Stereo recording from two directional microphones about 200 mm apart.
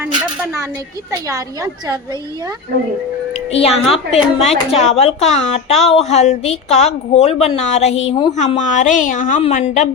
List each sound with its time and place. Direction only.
3.6 s a woman's voice: 30° left (ahead or behind)